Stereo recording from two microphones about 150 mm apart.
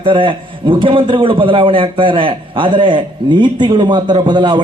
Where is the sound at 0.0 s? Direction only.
35° right (ahead or behind).